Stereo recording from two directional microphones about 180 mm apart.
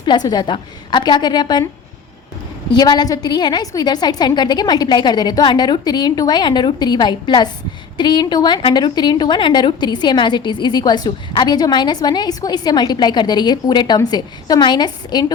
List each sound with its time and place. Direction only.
0.0 s a woman's voice: 25° left (ahead or behind)
2.7 s a woman's voice: 20° left (ahead or behind)